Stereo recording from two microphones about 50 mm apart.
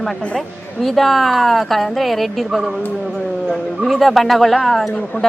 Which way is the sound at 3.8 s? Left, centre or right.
Centre.